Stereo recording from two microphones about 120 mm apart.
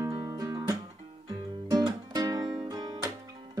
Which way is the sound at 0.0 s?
25° right (ahead or behind).